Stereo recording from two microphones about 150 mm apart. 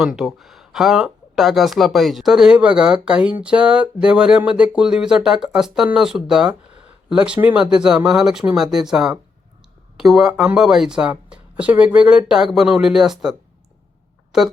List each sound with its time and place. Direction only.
0.0 s speech: centre (ahead or behind)
6.7 s a sound: 40° right (ahead or behind)
7.1 s speech: 5° right (ahead or behind)
14.3 s speech: 5° right (ahead or behind)